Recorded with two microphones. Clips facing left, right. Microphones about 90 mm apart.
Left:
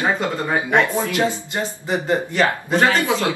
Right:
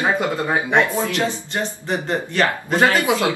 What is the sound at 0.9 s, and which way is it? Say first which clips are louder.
Speech: left 1 dB; 15° left (ahead or behind).